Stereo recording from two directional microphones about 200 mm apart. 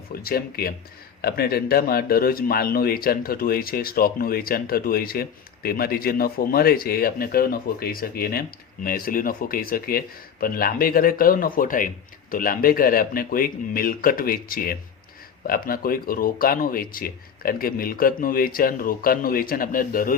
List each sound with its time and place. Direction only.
0.1 s speech: 50° left (ahead or behind)